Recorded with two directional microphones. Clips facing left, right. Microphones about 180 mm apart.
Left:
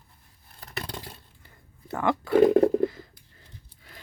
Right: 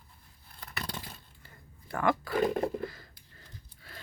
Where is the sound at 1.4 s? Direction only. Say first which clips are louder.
Left 12 dB; 20° left (ahead or behind).